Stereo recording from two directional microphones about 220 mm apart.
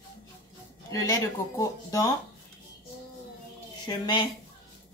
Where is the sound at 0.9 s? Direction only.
15° left (ahead or behind).